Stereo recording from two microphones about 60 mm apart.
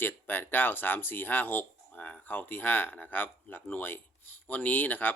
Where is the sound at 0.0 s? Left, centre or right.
Left.